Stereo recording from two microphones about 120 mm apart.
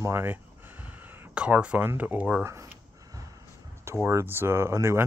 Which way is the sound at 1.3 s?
10° right (ahead or behind).